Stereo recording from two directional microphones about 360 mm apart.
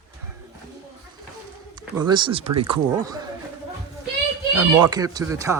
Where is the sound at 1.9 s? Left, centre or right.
Centre.